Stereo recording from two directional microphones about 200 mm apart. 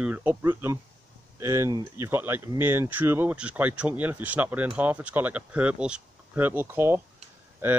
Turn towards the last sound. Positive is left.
turn(degrees=-10)  # may be behind; listen again after turning